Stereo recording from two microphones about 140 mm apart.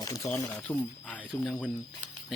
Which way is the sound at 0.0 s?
25° left (ahead or behind).